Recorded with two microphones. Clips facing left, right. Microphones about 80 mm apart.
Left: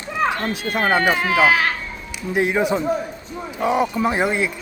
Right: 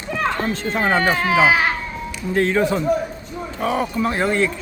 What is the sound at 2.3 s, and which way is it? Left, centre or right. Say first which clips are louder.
Speech: right 1 dB; centre.